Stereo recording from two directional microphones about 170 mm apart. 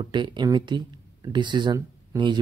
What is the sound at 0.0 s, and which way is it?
A woman's voice, 25° right (ahead or behind).